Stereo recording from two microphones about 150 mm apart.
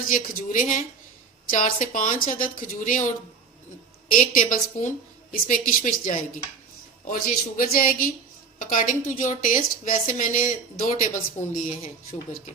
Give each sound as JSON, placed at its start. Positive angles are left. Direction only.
{"t": 0.1, "sound": "a woman's voice", "side_deg": 65}
{"t": 4.1, "sound": "a woman's voice", "side_deg": 65}